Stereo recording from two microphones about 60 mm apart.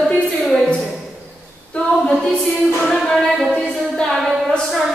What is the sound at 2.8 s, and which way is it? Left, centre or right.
Music, centre.